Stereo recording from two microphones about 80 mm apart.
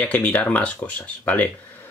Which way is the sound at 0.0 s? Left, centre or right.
Centre.